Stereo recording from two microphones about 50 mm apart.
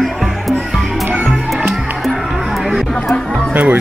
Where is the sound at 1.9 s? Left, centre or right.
Centre.